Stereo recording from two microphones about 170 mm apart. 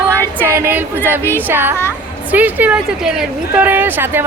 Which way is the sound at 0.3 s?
15° right (ahead or behind).